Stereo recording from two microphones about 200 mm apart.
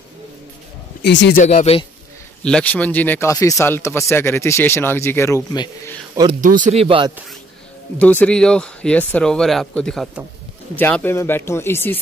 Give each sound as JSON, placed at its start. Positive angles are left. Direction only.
{"t": 1.0, "sound": "speech", "side_deg": 60}
{"t": 1.4, "sound": "speech", "side_deg": 30}
{"t": 2.4, "sound": "speech", "side_deg": 5}
{"t": 6.4, "sound": "speech", "side_deg": -40}
{"t": 8.0, "sound": "speech", "side_deg": 5}